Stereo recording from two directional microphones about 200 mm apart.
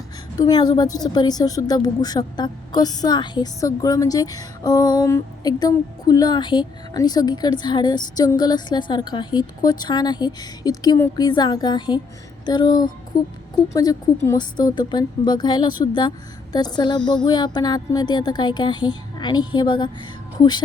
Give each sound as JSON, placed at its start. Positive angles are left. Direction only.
{"t": 0.3, "sound": "a woman's voice", "side_deg": 20}